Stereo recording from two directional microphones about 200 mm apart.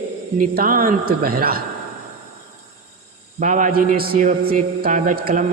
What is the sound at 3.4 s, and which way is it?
A man's voice, 40° right (ahead or behind).